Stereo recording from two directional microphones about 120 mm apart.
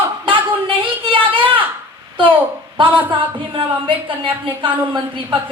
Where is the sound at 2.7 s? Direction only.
45° right (ahead or behind).